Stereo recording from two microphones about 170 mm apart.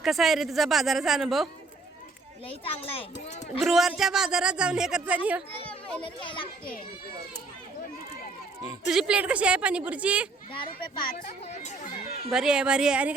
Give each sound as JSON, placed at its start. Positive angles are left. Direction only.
{"t": 0.0, "sound": "a man's voice", "side_deg": 0}
{"t": 2.5, "sound": "a child's voice", "side_deg": 35}
{"t": 3.6, "sound": "a man's voice", "side_deg": 0}
{"t": 6.0, "sound": "a child's voice", "side_deg": 30}
{"t": 8.9, "sound": "a woman's voice", "side_deg": -5}
{"t": 11.2, "sound": "speech", "side_deg": 45}
{"t": 12.3, "sound": "a man's voice", "side_deg": -5}